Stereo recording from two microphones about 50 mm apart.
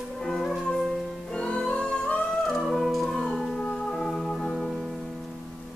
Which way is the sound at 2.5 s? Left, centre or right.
Centre.